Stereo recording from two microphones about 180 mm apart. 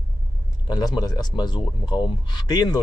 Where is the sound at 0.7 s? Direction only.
20° left (ahead or behind).